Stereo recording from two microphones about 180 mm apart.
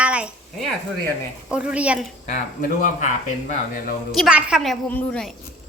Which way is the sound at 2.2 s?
45° left (ahead or behind).